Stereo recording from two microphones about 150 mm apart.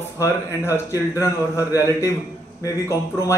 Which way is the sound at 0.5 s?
20° left (ahead or behind).